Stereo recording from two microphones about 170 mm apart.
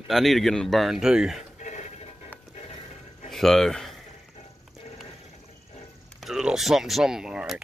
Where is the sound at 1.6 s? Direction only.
45° left (ahead or behind).